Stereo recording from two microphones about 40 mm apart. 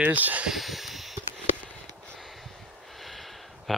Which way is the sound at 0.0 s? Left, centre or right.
Right.